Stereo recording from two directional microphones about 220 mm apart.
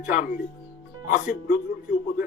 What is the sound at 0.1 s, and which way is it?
Speech, 40° left (ahead or behind).